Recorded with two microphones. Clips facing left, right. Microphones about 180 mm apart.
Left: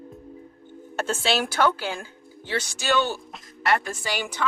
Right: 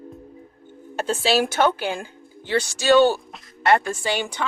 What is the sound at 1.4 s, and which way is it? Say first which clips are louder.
Speech: right 3 dB; 20° right (ahead or behind).